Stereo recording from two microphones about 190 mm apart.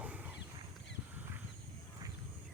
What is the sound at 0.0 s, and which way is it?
Wild animals, 10° right (ahead or behind).